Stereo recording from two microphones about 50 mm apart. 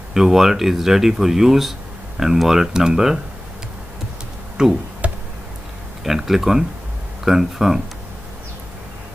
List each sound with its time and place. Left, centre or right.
0.1 s speech: centre
4.6 s speech: centre
5.0 s a sound: right
6.0 s speech: centre